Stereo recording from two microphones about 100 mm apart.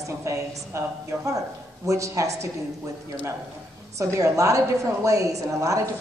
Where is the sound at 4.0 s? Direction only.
30° right (ahead or behind).